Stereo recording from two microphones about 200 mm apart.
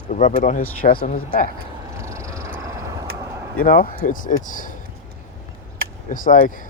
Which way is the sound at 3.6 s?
45° left (ahead or behind).